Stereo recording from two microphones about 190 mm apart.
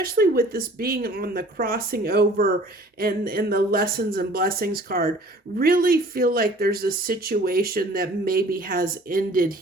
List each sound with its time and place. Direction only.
0.0 s speech: 50° right (ahead or behind)